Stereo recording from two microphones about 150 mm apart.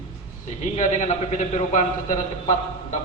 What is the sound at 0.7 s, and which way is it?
Speech, 50° left (ahead or behind).